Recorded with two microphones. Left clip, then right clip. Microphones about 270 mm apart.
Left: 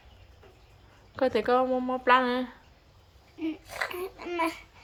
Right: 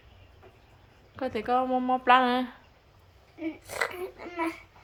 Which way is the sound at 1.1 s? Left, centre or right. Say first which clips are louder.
Left 3 dB; centre.